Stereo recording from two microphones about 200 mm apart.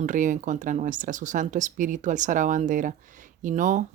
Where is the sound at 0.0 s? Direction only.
40° right (ahead or behind).